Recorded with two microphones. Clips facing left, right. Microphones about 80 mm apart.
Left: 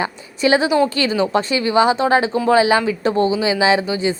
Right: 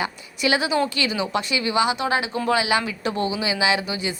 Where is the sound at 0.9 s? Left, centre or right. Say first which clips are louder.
Left 7 dB; left.